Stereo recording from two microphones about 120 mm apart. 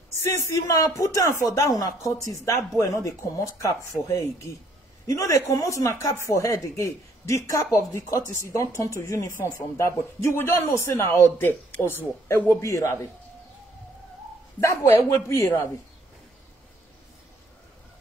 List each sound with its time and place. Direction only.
0.5 s speech: 25° left (ahead or behind)
14.6 s speech: 25° left (ahead or behind)